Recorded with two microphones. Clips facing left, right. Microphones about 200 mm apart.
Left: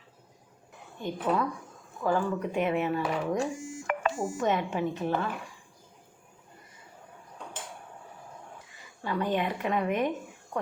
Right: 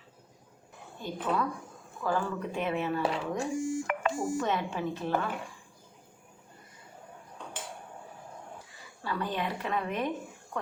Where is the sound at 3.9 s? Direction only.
40° left (ahead or behind).